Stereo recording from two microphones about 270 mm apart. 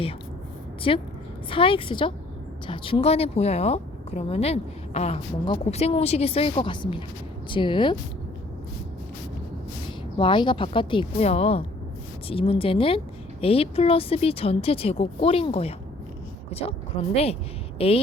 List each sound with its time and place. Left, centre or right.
0.8 s a woman's voice: centre
10.2 s a woman's voice: centre